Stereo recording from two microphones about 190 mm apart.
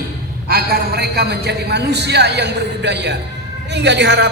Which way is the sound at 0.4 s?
55° right (ahead or behind).